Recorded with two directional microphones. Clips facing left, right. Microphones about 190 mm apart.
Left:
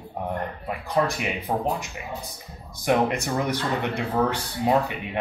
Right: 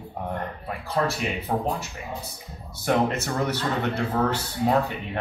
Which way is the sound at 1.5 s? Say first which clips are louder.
Even; 10° left (ahead or behind).